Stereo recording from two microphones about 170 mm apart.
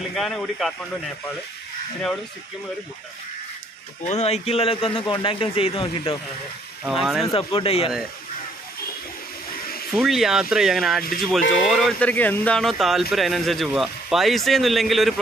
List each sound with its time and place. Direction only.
0.1 s speech: centre (ahead or behind)
4.0 s a man's voice: 40° left (ahead or behind)
6.9 s speech: centre (ahead or behind)
7.3 s a man's voice: 35° left (ahead or behind)
9.9 s speech: centre (ahead or behind)